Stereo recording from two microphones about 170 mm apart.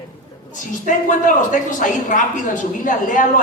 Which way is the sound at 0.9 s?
50° left (ahead or behind).